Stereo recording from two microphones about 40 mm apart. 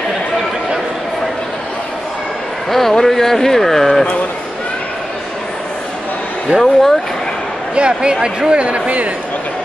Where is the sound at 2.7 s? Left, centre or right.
Centre.